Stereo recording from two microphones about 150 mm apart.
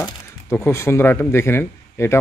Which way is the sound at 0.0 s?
15° left (ahead or behind).